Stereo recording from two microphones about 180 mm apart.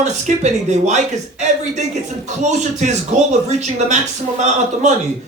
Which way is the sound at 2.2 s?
40° right (ahead or behind).